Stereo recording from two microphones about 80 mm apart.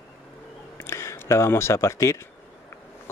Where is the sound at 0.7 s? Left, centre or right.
Left.